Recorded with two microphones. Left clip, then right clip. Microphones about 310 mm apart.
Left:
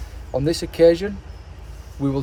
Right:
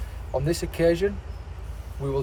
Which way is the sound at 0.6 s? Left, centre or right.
Left.